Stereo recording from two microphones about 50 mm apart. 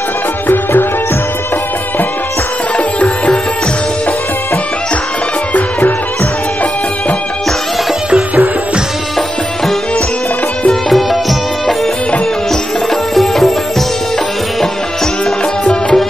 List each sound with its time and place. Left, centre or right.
5.5 s music: left
10.7 s music: centre
13.1 s music: centre
15.6 s music: left